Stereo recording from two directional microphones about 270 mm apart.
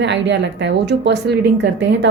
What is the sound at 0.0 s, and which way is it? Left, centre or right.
A woman's voice, right.